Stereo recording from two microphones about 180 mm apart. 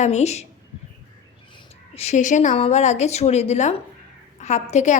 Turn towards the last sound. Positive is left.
turn(degrees=40)  # may be behind; listen again after turning